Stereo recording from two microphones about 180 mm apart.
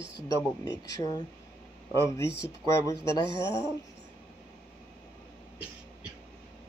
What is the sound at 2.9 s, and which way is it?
Speech, 25° right (ahead or behind).